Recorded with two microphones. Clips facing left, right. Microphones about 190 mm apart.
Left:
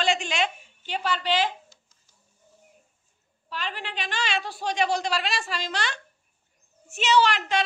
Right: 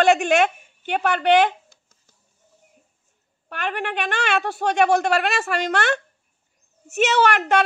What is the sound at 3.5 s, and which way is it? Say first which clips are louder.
A woman's voice: right 7 dB; 60° right (ahead or behind).